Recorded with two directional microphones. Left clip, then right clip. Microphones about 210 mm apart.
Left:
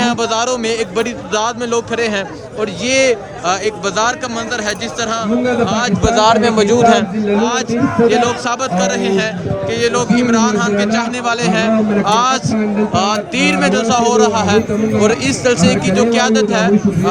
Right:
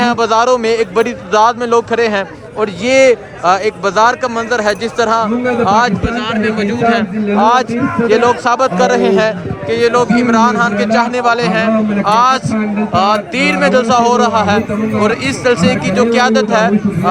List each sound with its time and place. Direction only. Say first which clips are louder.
0.0 s speech: right 4 dB; 5° left (ahead or behind)
6.0 s a man's voice: left 6 dB; 20° left (ahead or behind)
7.3 s a man's voice: right 7 dB; centre (ahead or behind)